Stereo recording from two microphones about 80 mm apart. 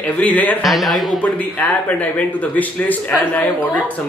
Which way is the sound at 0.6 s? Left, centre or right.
Centre.